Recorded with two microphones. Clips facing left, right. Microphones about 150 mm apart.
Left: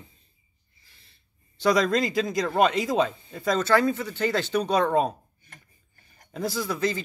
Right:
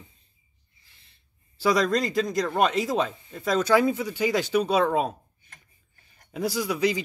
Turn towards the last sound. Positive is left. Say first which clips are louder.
# right 2 dB
turn(degrees=-10)  # may be behind; listen again after turning